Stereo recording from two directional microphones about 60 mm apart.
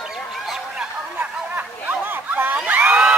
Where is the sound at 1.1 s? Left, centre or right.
Right.